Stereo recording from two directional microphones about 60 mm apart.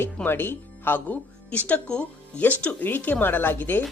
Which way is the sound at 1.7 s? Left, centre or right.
Centre.